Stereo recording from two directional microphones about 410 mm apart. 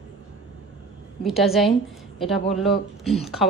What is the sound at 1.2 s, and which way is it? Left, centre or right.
A woman's voice, centre.